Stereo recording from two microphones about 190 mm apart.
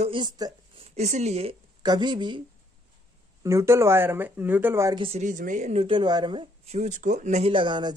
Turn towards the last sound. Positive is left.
turn(degrees=-25)  # may be behind; listen again after turning